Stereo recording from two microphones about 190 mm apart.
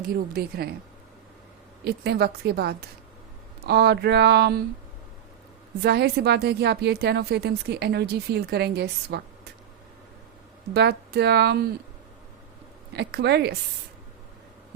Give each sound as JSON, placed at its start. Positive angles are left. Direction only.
{"t": 0.3, "sound": "a woman's voice", "side_deg": -55}
{"t": 1.8, "sound": "a woman's voice", "side_deg": -55}
{"t": 5.8, "sound": "a woman's voice", "side_deg": -60}
{"t": 10.8, "sound": "a woman's voice", "side_deg": -60}
{"t": 12.9, "sound": "a woman's voice", "side_deg": -60}